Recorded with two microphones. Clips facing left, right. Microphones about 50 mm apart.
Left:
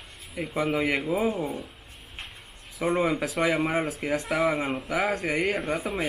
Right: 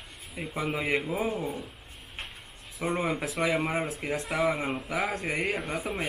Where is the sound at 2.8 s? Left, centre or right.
Left.